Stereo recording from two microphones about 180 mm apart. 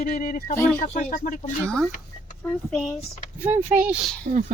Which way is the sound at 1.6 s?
5° left (ahead or behind).